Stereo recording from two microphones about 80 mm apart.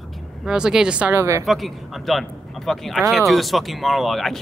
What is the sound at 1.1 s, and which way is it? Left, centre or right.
Speech, right.